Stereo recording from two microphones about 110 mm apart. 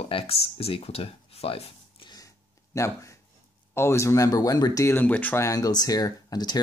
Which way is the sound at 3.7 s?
25° left (ahead or behind).